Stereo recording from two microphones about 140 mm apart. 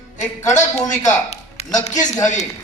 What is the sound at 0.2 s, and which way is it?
A woman's voice, 60° left (ahead or behind).